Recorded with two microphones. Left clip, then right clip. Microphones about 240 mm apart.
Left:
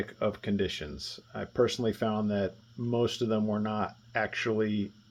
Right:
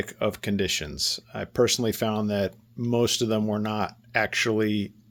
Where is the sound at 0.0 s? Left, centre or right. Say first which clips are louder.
Right 4 dB; right.